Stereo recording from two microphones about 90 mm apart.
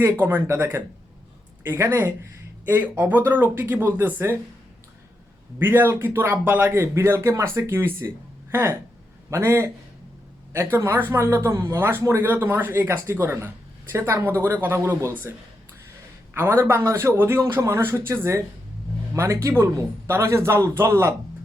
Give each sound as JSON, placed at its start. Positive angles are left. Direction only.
{"t": 0.0, "sound": "speech", "side_deg": -25}
{"t": 5.5, "sound": "a man's voice", "side_deg": -25}
{"t": 16.3, "sound": "speech", "side_deg": -30}